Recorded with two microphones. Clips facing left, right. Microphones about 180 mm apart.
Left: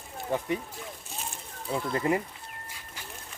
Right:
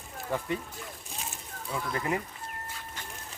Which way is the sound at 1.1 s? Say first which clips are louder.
Left 1 dB; centre (ahead or behind).